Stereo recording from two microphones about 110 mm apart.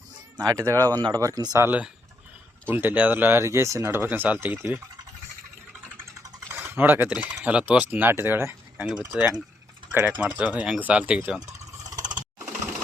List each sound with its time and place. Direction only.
0.3 s speech: 35° right (ahead or behind)
1.6 s speech: 15° right (ahead or behind)
6.5 s speech: 20° right (ahead or behind)
8.8 s speech: 10° right (ahead or behind)
11.8 s a sound: 35° right (ahead or behind)